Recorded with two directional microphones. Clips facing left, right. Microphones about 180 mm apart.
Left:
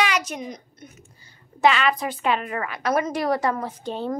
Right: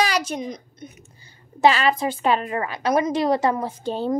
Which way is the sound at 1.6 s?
35° right (ahead or behind).